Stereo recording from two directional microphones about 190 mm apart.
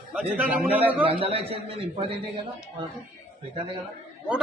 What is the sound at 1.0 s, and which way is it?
A man's voice, 30° right (ahead or behind).